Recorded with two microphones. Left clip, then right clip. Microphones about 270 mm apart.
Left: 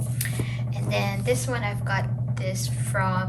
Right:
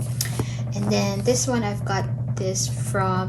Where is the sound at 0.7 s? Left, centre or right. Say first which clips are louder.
Right 3 dB; centre.